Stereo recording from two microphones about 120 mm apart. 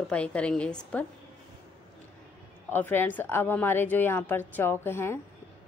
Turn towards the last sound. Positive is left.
turn(degrees=20)  # may be behind; listen again after turning